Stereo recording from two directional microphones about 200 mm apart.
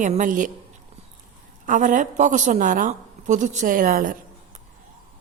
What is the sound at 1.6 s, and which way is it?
A woman's voice, 40° right (ahead or behind).